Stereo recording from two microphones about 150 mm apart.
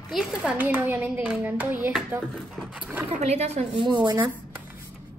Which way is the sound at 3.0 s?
45° right (ahead or behind).